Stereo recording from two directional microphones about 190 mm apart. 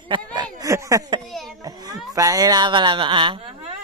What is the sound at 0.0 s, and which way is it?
Speech, 25° right (ahead or behind).